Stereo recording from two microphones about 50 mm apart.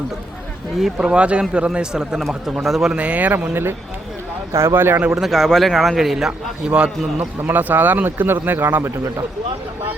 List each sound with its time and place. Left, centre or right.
0.9 s speech: right
2.6 s a man's voice: centre
2.9 s speech: right
3.5 s speech: right
5.2 s a man's voice: centre
5.7 s speech: centre
6.7 s speech: right
7.4 s speech: right